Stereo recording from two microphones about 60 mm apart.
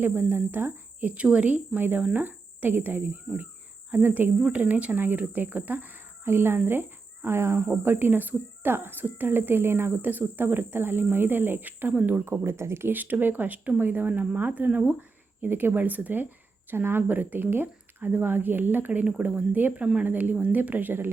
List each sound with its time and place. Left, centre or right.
0.0 s speech: right
6.2 s speech: right
12.9 s speech: right
15.4 s speech: right
18.9 s speech: right
19.8 s speech: centre
20.1 s speech: right